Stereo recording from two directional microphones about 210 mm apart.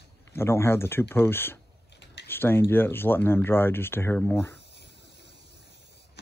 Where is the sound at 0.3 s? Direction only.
10° left (ahead or behind).